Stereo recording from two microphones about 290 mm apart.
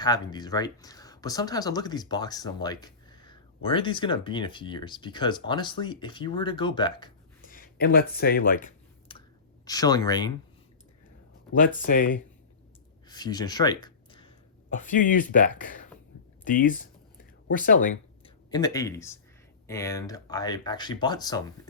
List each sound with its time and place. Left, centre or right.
0.0 s speech: centre
7.5 s a sound: left
9.6 s speech: centre
11.8 s speech: left
13.1 s speech: centre
18.5 s speech: centre